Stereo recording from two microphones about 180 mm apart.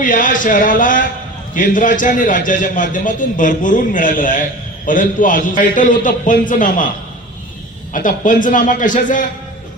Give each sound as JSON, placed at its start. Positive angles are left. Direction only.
{"t": 0.0, "sound": "a man's voice", "side_deg": 45}
{"t": 7.9, "sound": "a man's voice", "side_deg": 45}